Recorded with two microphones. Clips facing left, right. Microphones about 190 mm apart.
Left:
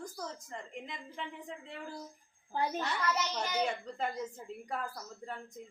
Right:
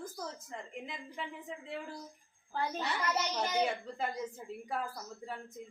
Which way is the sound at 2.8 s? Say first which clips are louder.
Even; 5° right (ahead or behind).